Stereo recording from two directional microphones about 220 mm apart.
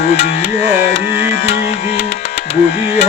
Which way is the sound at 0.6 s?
30° left (ahead or behind).